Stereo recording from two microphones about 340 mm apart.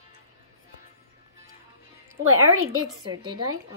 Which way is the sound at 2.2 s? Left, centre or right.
Right.